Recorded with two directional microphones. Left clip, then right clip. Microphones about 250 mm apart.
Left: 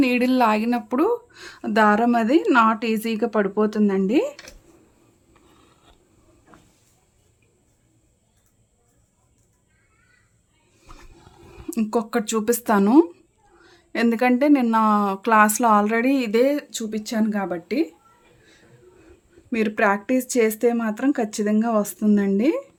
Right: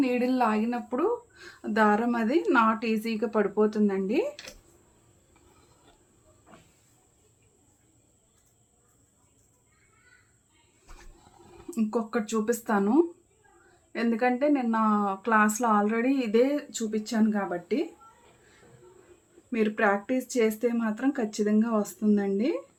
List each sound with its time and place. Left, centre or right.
0.0 s speech: left
11.7 s speech: left
19.5 s speech: left